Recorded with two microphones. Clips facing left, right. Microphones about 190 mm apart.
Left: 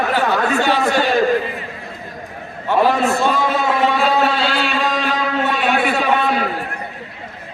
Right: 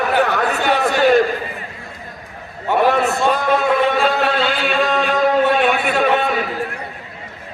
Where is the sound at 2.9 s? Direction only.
65° right (ahead or behind); by 6.3 s 45° right (ahead or behind).